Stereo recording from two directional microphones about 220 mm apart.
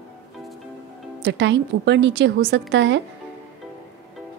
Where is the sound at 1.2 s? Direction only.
55° right (ahead or behind).